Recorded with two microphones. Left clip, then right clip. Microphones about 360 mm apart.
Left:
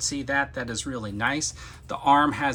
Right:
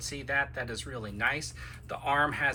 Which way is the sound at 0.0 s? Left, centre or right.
Centre.